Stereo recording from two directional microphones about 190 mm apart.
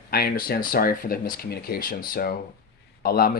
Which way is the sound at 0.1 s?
55° left (ahead or behind).